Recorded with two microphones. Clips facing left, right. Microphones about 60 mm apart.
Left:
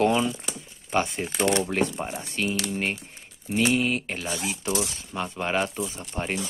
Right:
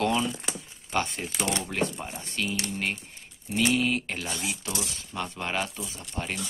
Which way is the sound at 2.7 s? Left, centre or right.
Centre.